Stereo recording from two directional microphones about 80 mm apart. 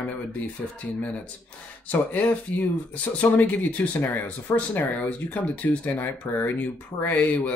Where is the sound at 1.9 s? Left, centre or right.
Centre.